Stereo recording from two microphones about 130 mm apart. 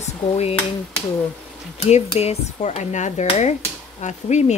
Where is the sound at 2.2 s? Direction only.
55° left (ahead or behind).